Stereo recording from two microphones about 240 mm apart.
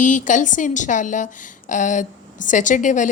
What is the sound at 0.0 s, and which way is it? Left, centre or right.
A woman's voice, left.